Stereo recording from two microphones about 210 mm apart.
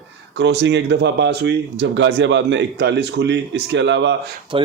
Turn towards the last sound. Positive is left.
turn(degrees=-25)  # may be behind; listen again after turning